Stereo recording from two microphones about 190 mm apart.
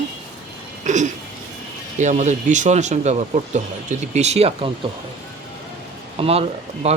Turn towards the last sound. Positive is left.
turn(degrees=-35)  # may be behind; listen again after turning